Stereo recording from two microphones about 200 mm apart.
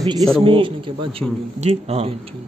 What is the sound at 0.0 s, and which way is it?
A man's voice, 25° right (ahead or behind).